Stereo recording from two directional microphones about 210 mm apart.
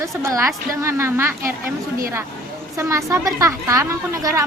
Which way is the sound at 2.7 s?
15° right (ahead or behind).